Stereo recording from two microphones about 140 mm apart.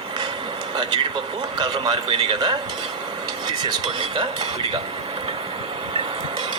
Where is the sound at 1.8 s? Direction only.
30° right (ahead or behind).